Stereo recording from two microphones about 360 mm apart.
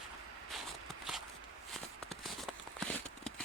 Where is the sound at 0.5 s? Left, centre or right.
Centre.